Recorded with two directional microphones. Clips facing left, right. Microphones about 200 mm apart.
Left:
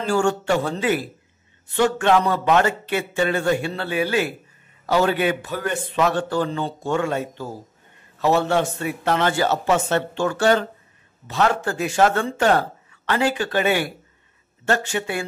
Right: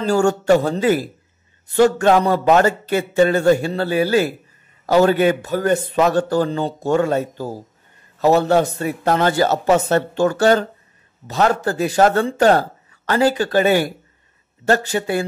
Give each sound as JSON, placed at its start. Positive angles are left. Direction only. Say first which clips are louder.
{"t": 0.0, "sound": "a man's voice", "louder": "right 4 dB", "side_deg": -40}